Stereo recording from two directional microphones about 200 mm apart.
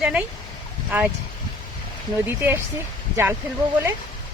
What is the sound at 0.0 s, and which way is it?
Speech, 5° right (ahead or behind).